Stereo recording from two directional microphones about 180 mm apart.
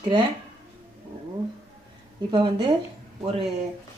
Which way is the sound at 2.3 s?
25° right (ahead or behind).